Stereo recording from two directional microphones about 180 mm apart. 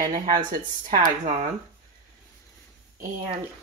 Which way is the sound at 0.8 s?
45° right (ahead or behind).